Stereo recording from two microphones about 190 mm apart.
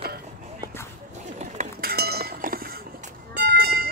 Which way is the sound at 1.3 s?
40° right (ahead or behind).